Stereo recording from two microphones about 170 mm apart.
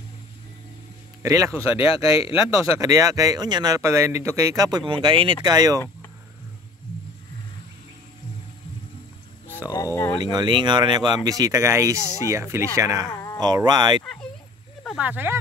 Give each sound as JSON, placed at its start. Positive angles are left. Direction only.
{"t": 1.2, "sound": "speech", "side_deg": -20}
{"t": 1.8, "sound": "speech", "side_deg": 35}
{"t": 2.8, "sound": "speech", "side_deg": -20}
{"t": 9.7, "sound": "a sound", "side_deg": 20}
{"t": 10.1, "sound": "speech", "side_deg": -25}
{"t": 15.0, "sound": "speech", "side_deg": -10}